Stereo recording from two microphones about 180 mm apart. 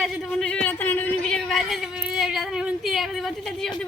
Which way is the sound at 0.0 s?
5° left (ahead or behind).